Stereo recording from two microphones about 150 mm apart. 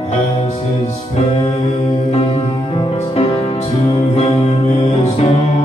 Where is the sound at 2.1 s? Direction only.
45° left (ahead or behind).